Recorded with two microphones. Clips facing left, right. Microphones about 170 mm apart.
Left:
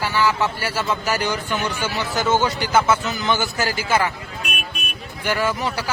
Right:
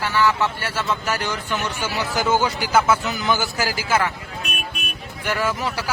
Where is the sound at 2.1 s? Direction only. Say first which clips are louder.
Left 1 dB; 10° right (ahead or behind).